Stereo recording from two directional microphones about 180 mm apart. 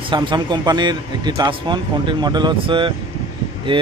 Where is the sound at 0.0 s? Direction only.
25° right (ahead or behind).